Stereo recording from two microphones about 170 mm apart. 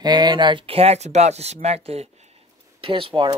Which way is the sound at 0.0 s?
25° right (ahead or behind).